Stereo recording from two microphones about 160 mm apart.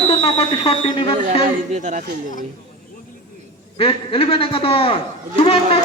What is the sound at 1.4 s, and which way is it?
Speech, 50° right (ahead or behind).